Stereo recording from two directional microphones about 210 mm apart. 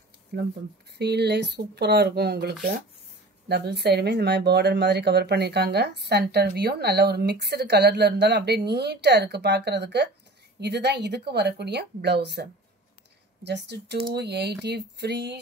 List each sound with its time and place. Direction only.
0.9 s speech: 50° right (ahead or behind)